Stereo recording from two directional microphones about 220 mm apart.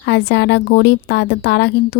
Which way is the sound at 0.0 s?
50° left (ahead or behind).